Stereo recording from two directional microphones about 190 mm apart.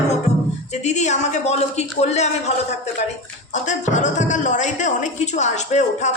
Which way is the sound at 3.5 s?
40° left (ahead or behind).